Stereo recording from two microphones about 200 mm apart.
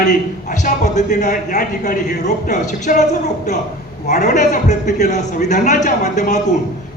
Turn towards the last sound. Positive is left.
turn(degrees=35)  # may be behind; listen again after turning